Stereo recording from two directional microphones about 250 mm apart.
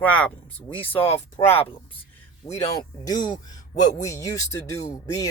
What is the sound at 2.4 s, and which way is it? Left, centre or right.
Speech, left.